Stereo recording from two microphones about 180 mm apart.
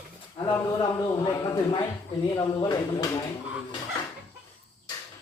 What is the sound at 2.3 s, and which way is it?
Speech, 20° left (ahead or behind).